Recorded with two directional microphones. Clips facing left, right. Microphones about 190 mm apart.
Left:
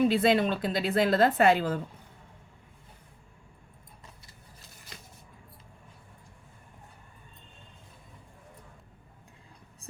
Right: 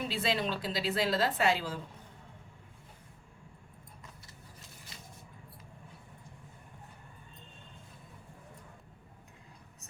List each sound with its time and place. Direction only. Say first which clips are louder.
0.1 s a woman's voice: left 9 dB; 55° left (ahead or behind)